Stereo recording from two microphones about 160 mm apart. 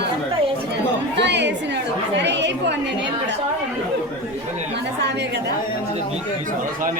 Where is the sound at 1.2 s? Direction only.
90° right.